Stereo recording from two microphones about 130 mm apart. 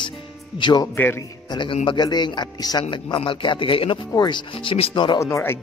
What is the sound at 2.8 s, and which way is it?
Speech, 40° left (ahead or behind).